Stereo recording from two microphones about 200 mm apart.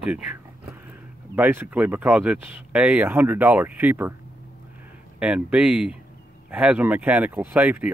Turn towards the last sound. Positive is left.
turn(degrees=-10)  # may be behind; listen again after turning